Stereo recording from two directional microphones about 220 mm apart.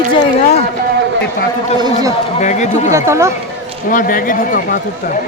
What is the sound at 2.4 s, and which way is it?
Speech, 35° left (ahead or behind).